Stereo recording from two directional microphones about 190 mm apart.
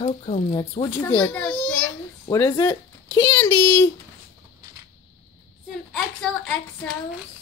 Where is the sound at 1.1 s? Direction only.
10° left (ahead or behind).